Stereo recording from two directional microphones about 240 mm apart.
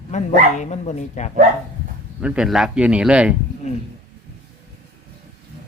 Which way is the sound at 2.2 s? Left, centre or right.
Centre.